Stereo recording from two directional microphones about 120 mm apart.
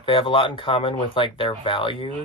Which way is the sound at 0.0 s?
45° left (ahead or behind).